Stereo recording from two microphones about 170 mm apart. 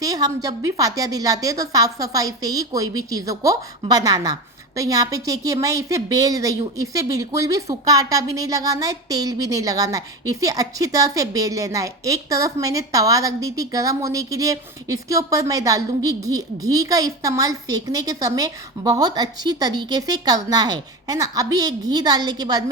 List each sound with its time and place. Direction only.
0.0 s a woman's voice: 20° right (ahead or behind)